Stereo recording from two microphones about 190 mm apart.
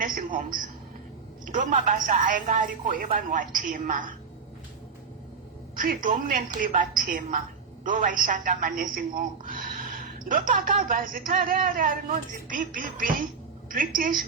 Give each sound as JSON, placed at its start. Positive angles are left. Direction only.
{"t": 0.0, "sound": "a sound", "side_deg": -45}
{"t": 0.3, "sound": "a woman's voice", "side_deg": -45}
{"t": 1.7, "sound": "a woman's voice", "side_deg": -40}
{"t": 5.7, "sound": "a woman's voice", "side_deg": -45}